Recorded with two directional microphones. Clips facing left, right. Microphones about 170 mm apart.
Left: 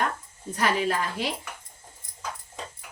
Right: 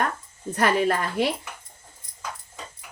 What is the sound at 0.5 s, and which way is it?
Speech, 55° right (ahead or behind).